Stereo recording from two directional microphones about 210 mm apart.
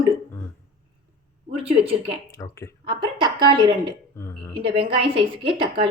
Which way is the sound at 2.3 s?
15° left (ahead or behind).